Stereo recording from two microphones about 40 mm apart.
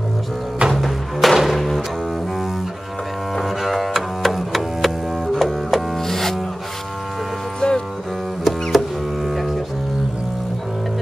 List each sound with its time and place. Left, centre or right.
0.7 s music: centre
3.3 s double bass: centre
5.3 s music: centre
7.6 s music: left
8.5 s music: centre